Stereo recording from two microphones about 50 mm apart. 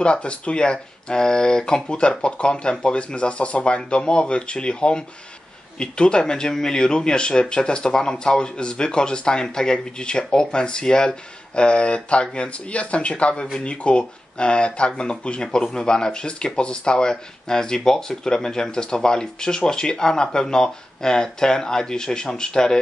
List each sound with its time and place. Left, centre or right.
0.0 s speech: left